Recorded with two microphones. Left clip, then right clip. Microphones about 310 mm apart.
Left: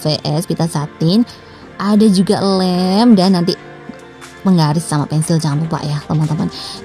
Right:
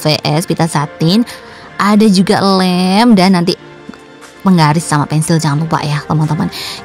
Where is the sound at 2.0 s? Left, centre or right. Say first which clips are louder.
Right 3 dB; right.